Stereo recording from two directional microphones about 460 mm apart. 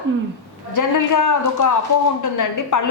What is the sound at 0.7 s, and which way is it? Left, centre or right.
A woman's voice, left.